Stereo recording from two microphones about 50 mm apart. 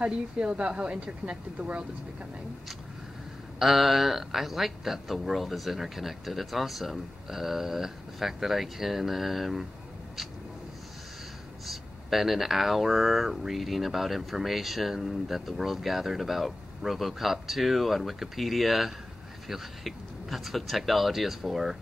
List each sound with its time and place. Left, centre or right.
0.0 s speech: centre
3.5 s speech: centre
11.6 s speech: centre